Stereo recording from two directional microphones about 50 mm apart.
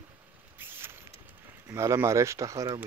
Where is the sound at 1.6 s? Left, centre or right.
Right.